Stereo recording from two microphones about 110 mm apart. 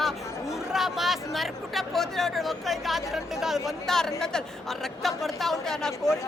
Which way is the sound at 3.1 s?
5° right (ahead or behind).